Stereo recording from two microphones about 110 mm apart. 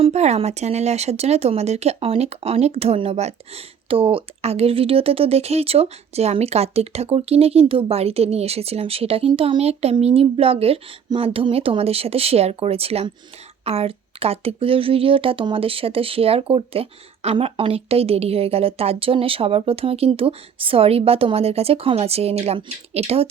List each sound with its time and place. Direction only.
0.0 s a woman's voice: 80° right